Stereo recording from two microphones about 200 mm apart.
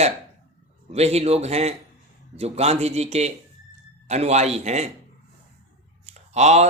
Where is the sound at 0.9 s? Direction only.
30° right (ahead or behind).